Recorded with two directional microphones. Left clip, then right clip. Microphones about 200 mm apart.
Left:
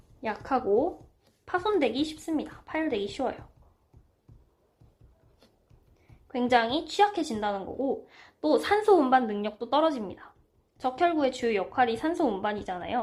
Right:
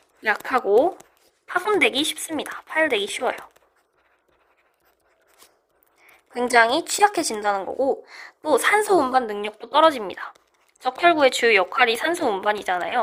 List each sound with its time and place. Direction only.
0.2 s speech: 50° right (ahead or behind)
6.3 s speech: 50° right (ahead or behind)